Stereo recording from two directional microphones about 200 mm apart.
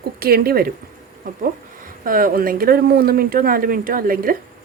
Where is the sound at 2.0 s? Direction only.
45° right (ahead or behind).